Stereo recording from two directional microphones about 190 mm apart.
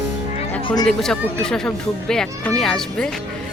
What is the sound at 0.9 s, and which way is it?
Speech, centre (ahead or behind).